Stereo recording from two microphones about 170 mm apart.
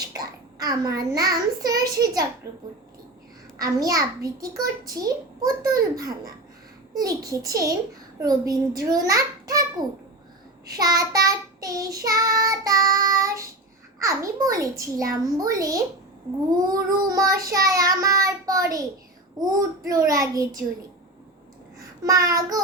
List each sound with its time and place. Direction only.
0.1 s a child's voice: 20° right (ahead or behind)
3.6 s child singing: 20° right (ahead or behind)
10.7 s child singing: 20° right (ahead or behind)
22.0 s child singing: 20° right (ahead or behind)